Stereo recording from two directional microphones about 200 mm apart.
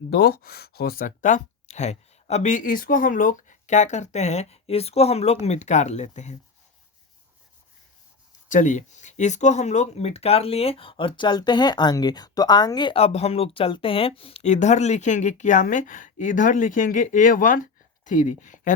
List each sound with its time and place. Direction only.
0.1 s speech: 50° left (ahead or behind); by 6.3 s 35° left (ahead or behind)
8.4 s speech: 40° left (ahead or behind)